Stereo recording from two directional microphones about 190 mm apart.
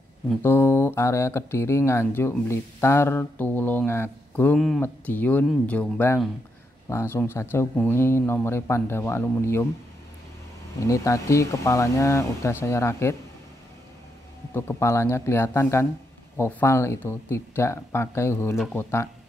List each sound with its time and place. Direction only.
0.4 s speech: 10° left (ahead or behind)
10.8 s speech: 15° left (ahead or behind)
14.5 s speech: 15° left (ahead or behind)